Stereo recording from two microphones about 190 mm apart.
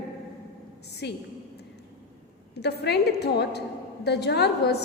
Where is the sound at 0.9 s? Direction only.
60° left (ahead or behind).